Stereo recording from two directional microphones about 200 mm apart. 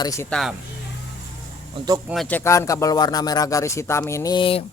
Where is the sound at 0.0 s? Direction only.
15° left (ahead or behind).